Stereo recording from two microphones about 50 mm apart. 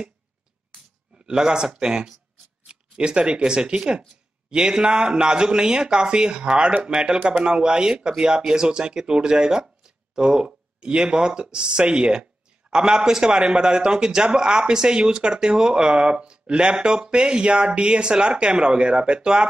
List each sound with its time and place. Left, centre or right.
1.1 s speech: centre